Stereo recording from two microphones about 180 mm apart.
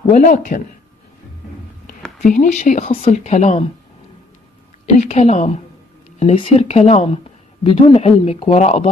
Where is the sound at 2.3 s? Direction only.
40° left (ahead or behind).